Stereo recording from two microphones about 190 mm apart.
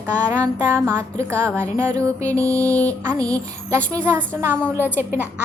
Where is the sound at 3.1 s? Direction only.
15° right (ahead or behind).